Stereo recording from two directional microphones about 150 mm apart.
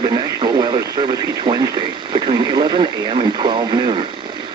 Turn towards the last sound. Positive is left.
turn(degrees=-30)  # may be behind; listen again after turning